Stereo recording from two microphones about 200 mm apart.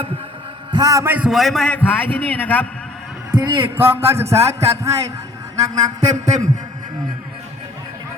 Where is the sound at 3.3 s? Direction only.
25° right (ahead or behind).